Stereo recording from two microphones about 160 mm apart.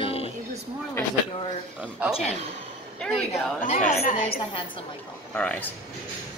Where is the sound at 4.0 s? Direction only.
65° left (ahead or behind).